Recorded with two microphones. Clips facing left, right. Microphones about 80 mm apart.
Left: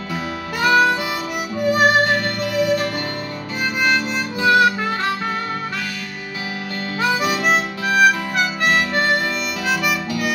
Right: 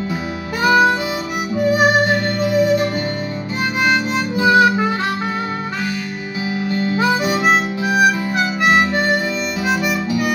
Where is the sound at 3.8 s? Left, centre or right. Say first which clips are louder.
Right 2 dB; centre.